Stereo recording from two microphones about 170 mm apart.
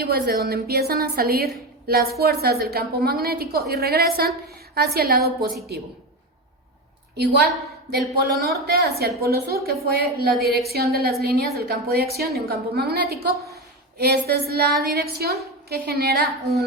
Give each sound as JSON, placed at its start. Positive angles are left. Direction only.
{"t": 0.0, "sound": "a woman's voice", "side_deg": -65}
{"t": 7.9, "sound": "a woman's voice", "side_deg": -70}